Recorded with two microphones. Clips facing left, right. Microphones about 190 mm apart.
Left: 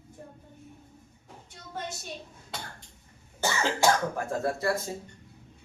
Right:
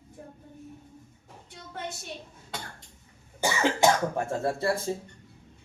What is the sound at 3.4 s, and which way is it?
A man's voice, 15° right (ahead or behind).